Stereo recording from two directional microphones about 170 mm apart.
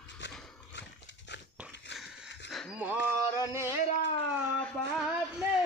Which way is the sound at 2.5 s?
Centre (ahead or behind).